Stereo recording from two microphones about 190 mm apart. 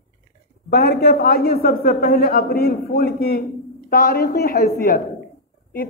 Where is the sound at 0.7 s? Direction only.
55° left (ahead or behind).